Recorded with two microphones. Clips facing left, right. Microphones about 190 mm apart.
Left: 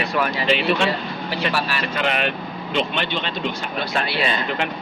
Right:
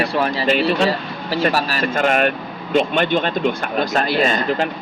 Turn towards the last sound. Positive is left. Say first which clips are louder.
# right 5 dB
turn(degrees=-40)  # may be behind; listen again after turning